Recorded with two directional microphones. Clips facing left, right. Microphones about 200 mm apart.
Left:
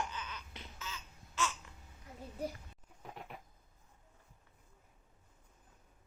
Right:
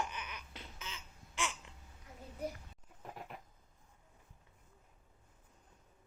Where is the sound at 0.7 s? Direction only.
20° right (ahead or behind).